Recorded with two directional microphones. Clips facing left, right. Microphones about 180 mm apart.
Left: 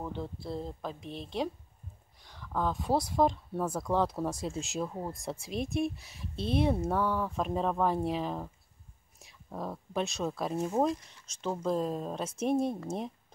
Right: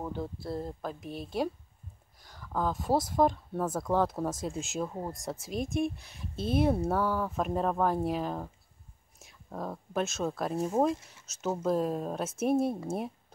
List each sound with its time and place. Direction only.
0.0 s speech: 5° right (ahead or behind)